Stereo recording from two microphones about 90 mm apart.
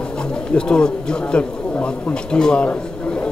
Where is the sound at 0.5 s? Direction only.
10° left (ahead or behind).